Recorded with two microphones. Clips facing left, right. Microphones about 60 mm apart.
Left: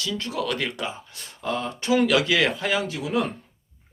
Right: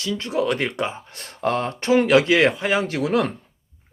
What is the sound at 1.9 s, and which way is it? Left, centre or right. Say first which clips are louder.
Speech: right 4 dB; right.